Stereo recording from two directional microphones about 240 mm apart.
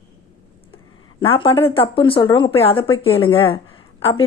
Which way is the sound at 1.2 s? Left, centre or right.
Left.